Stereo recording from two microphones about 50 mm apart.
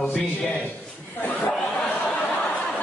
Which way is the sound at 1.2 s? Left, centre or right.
Left.